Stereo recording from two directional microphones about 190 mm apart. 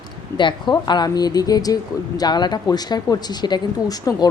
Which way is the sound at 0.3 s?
25° left (ahead or behind).